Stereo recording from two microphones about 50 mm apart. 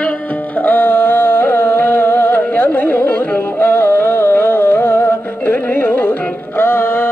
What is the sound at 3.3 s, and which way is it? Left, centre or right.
Music, left.